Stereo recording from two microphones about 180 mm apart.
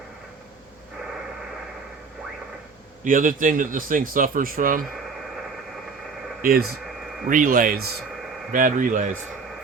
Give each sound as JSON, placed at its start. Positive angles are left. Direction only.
{"t": 3.0, "sound": "speech", "side_deg": -50}
{"t": 6.4, "sound": "speech", "side_deg": -55}